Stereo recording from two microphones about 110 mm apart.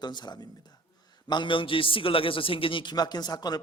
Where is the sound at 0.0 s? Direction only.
40° left (ahead or behind).